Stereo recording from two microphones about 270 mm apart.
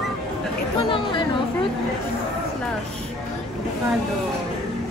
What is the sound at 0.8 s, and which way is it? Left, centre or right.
Chatter, centre.